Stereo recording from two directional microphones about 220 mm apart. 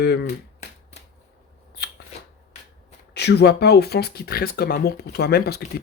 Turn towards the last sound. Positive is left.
turn(degrees=45)  # may be behind; listen again after turning